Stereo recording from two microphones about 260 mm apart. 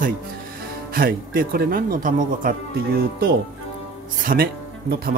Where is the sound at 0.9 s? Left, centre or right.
Right.